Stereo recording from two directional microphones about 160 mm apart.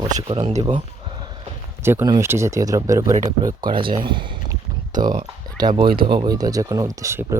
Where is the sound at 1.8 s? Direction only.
15° right (ahead or behind); by 4.2 s 30° right (ahead or behind).